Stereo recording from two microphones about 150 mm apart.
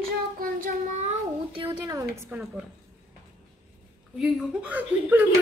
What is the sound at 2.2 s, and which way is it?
Speech, 10° right (ahead or behind).